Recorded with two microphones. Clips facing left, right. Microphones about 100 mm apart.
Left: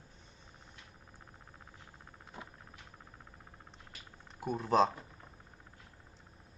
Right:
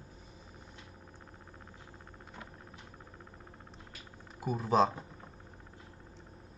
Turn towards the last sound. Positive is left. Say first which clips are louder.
# right 1 dB
turn(degrees=0)  # may be behind; listen again after turning